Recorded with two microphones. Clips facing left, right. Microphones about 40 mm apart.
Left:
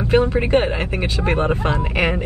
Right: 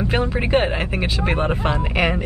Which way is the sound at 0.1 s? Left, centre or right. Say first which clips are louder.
Left 9 dB; right.